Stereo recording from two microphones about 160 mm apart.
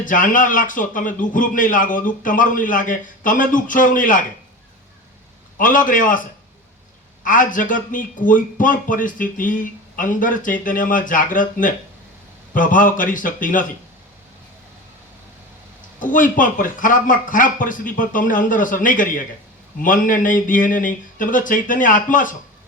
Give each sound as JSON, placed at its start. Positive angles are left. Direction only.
{"t": 0.0, "sound": "a man's voice", "side_deg": 55}
{"t": 5.5, "sound": "a man's voice", "side_deg": 55}
{"t": 7.3, "sound": "a man's voice", "side_deg": 55}
{"t": 16.0, "sound": "a man's voice", "side_deg": 55}